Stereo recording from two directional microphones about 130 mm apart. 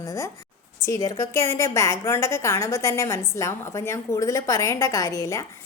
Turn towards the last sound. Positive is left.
turn(degrees=25)  # may be behind; listen again after turning